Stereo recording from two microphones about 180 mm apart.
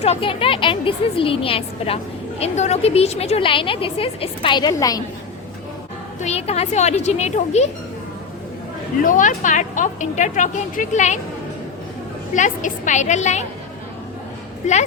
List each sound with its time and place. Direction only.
0.0 s a woman's voice: 35° left (ahead or behind)
6.1 s a woman's voice: 35° left (ahead or behind)
9.0 s a woman's voice: 45° left (ahead or behind)
12.3 s a woman's voice: 45° left (ahead or behind)
14.6 s a woman's voice: 40° left (ahead or behind)